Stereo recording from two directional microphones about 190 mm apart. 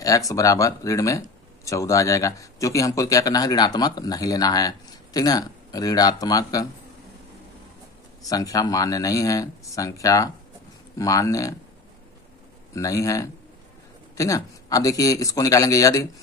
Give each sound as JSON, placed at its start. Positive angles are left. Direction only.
{"t": 0.0, "sound": "speech", "side_deg": 15}
{"t": 8.2, "sound": "speech", "side_deg": 20}
{"t": 12.7, "sound": "speech", "side_deg": 15}